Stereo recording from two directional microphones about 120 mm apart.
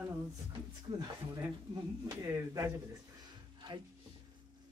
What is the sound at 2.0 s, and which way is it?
Speech, 25° right (ahead or behind).